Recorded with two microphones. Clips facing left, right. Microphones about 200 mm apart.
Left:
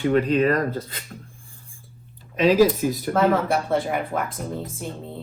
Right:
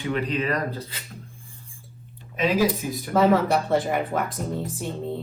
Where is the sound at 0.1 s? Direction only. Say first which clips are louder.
Left 5 dB; 45° left (ahead or behind).